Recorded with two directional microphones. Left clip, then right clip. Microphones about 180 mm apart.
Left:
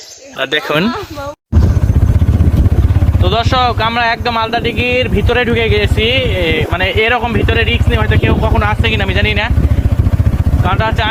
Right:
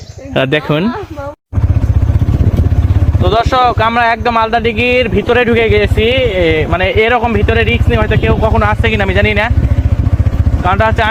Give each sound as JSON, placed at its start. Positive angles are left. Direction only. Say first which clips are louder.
{"t": 0.3, "sound": "speech", "louder": "right 2 dB", "side_deg": 5}
{"t": 3.2, "sound": "speech", "louder": "right 3 dB", "side_deg": -35}
{"t": 10.7, "sound": "speech", "louder": "right 4 dB", "side_deg": -50}